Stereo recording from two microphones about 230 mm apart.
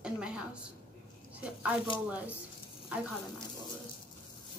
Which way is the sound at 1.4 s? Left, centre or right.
Centre.